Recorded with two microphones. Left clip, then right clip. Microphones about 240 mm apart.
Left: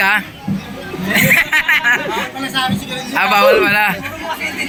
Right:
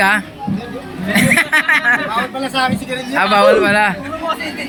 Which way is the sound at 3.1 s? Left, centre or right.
Centre.